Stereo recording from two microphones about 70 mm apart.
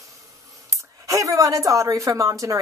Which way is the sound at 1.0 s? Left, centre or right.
Right.